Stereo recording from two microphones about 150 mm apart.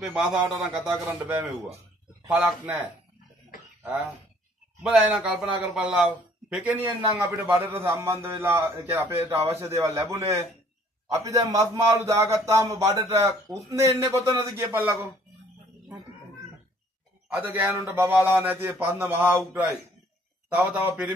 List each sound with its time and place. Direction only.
0.0 s a man's voice: 5° right (ahead or behind)
3.8 s a man's voice: 10° right (ahead or behind)
17.3 s a man's voice: 10° right (ahead or behind)